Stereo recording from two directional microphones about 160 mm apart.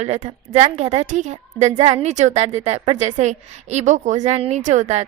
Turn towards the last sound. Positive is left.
turn(degrees=-45)  # may be behind; listen again after turning